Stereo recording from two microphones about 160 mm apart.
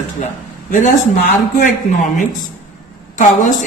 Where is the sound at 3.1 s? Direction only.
50° left (ahead or behind).